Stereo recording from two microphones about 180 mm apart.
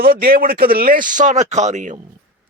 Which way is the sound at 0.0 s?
55° right (ahead or behind).